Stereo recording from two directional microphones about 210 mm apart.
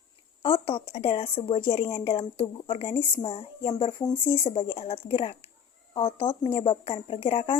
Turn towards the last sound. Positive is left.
turn(degrees=25)  # may be behind; listen again after turning